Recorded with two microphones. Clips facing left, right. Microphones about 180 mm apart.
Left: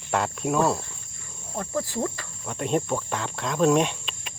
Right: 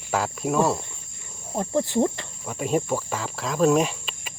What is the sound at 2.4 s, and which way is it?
Cricket, 5° right (ahead or behind).